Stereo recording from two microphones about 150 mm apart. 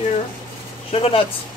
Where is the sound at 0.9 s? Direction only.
40° left (ahead or behind).